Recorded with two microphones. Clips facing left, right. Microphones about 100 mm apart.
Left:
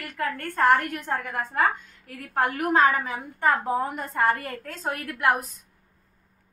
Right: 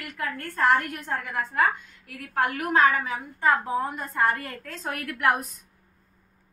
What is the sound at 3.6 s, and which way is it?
Speech, 55° left (ahead or behind).